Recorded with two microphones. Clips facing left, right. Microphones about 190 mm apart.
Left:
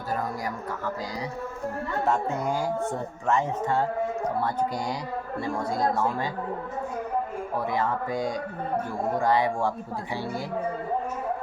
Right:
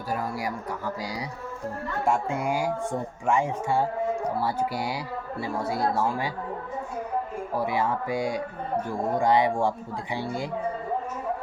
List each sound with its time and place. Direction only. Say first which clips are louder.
0.1 s speech: even; 10° right (ahead or behind)
2.0 s speech: right 1 dB; 10° right (ahead or behind)
7.6 s speech: right 1 dB; 10° right (ahead or behind)